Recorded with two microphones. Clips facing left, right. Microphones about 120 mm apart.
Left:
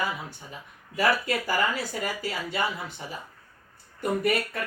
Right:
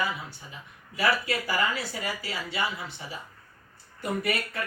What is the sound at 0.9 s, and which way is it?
Speech, 45° left (ahead or behind).